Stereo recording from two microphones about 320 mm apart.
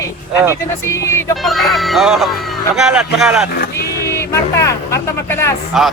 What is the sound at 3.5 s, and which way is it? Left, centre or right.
Speech, left.